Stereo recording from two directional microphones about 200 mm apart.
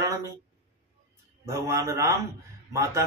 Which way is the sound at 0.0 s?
15° right (ahead or behind).